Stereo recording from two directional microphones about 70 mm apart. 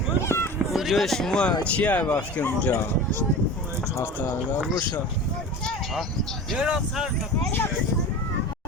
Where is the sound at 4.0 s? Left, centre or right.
Left.